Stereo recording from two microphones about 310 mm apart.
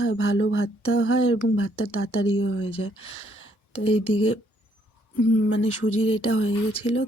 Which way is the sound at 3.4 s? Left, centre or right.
Left.